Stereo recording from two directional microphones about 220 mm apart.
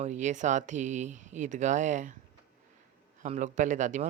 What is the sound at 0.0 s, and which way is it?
Speech, 30° right (ahead or behind).